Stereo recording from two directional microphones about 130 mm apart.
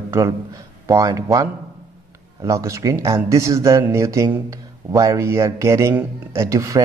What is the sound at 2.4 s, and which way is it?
A man's voice, 25° right (ahead or behind).